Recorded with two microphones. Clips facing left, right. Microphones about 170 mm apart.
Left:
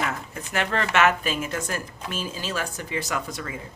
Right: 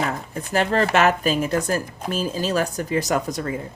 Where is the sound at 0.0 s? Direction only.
35° right (ahead or behind).